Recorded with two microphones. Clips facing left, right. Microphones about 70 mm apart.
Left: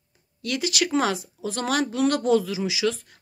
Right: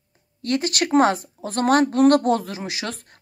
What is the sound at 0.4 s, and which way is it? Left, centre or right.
A woman's voice, right.